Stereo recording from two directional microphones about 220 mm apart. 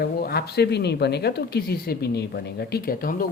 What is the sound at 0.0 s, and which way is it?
Speech, 45° left (ahead or behind).